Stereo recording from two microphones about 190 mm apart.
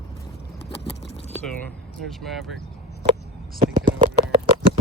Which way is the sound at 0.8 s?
35° left (ahead or behind).